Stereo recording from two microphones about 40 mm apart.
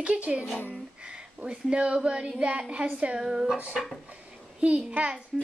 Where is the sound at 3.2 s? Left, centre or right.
Centre.